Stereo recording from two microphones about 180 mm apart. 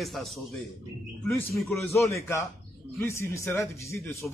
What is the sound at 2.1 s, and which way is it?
Speech, 15° left (ahead or behind).